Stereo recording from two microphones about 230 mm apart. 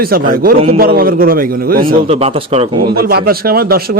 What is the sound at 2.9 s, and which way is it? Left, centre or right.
Speech, right.